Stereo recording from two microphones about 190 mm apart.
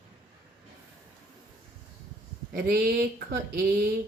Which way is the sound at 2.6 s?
55° right (ahead or behind).